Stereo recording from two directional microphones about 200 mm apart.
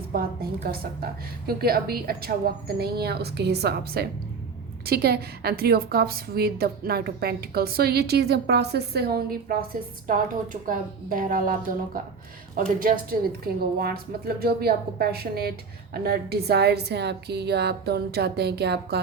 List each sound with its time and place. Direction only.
0.1 s a woman's voice: 50° right (ahead or behind)
12.5 s a woman's voice: 45° right (ahead or behind)